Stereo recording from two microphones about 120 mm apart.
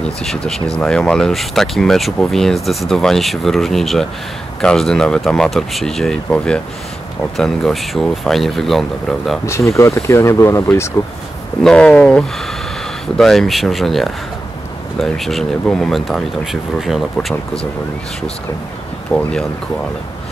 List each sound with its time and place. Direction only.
0.2 s speech: centre (ahead or behind)
9.5 s speech: 25° left (ahead or behind)
11.6 s speech: 5° left (ahead or behind)
19.1 s speech: 25° left (ahead or behind)